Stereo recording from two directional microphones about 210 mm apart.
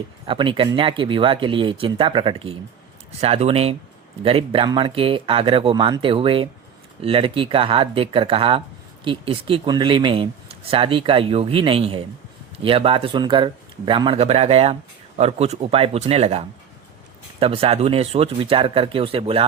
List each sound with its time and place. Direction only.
0.3 s speech: 25° right (ahead or behind)
17.4 s speech: 25° right (ahead or behind)